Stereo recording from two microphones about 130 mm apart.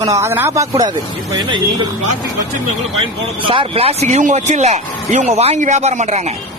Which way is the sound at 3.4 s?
45° right (ahead or behind).